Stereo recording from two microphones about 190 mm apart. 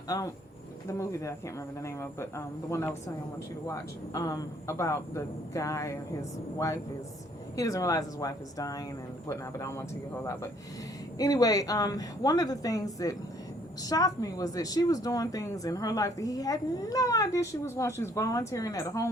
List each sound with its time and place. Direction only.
0.1 s speech: 15° left (ahead or behind)
7.5 s speech: 15° left (ahead or behind)
11.2 s a woman's voice: 20° left (ahead or behind)